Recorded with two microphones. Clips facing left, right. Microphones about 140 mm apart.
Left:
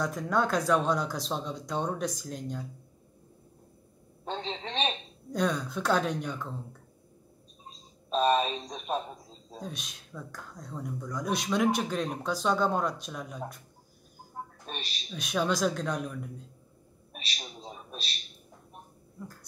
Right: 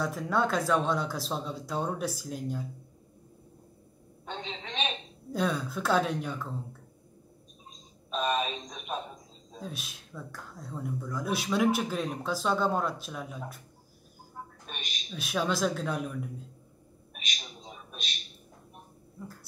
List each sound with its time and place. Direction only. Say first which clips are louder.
0.0 s speech: even; centre (ahead or behind)
4.2 s speech: left 4 dB; 35° left (ahead or behind)
5.3 s speech: left 1 dB; 5° right (ahead or behind)
8.1 s speech: left 4 dB; 35° left (ahead or behind)
9.6 s speech: even; 5° right (ahead or behind)
14.4 s bird: left 3 dB; 35° left (ahead or behind)
14.7 s a woman's voice: left 3 dB; 35° left (ahead or behind)
15.0 s speech: left 1 dB; centre (ahead or behind)
17.1 s a sound: left 1 dB; 35° left (ahead or behind)